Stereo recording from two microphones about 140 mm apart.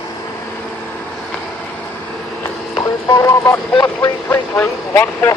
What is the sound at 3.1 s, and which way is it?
Speech, 20° left (ahead or behind).